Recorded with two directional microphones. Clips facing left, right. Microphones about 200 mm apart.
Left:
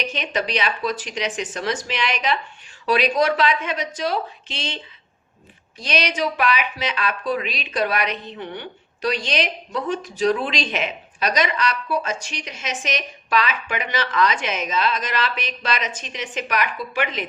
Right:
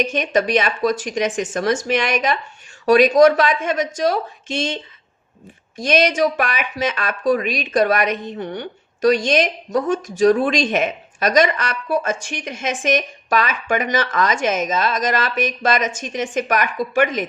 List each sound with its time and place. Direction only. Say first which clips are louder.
0.0 s speech: right 7 dB; 45° right (ahead or behind)